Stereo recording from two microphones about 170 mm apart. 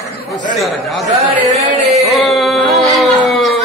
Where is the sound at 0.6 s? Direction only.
Centre (ahead or behind).